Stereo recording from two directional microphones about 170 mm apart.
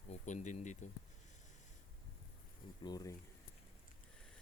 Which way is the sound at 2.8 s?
20° left (ahead or behind).